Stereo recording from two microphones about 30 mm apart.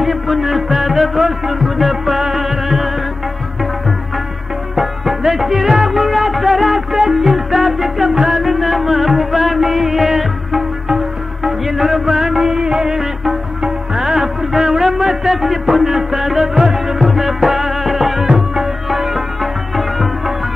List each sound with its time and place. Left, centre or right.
0.0 s music: centre
4.7 s music: centre; by 12.9 s right
12.9 s music: centre